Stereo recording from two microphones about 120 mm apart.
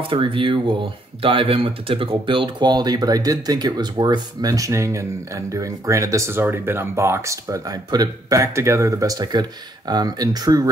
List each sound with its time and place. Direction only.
0.0 s speech: 45° right (ahead or behind)